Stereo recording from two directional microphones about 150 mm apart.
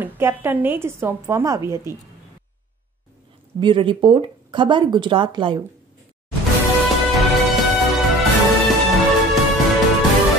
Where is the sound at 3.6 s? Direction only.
35° right (ahead or behind).